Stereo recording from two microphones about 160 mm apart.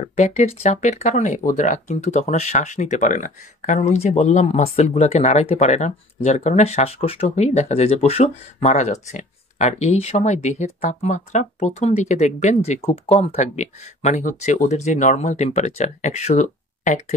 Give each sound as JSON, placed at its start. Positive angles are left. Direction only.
{"t": 0.0, "sound": "speech", "side_deg": 40}